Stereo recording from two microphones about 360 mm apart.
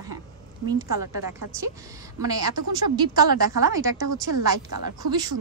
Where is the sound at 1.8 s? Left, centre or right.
Centre.